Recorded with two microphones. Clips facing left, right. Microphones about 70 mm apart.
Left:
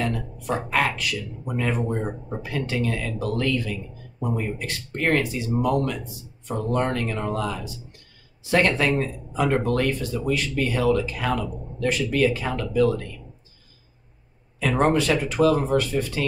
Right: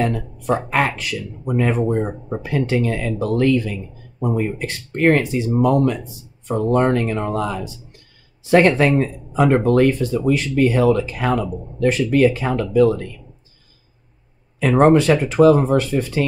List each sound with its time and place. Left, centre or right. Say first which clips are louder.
0.0 s speech: right 6 dB; right
9.0 s speech: right 7 dB; right
14.6 s speech: right 7 dB; right